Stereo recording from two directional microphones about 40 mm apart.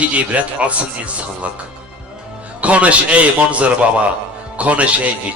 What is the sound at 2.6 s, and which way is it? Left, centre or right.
A man's voice, right.